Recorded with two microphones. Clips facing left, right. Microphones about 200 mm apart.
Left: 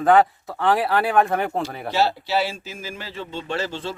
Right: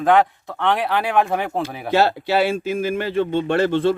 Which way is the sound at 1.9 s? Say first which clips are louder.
Right 5 dB; 55° right (ahead or behind).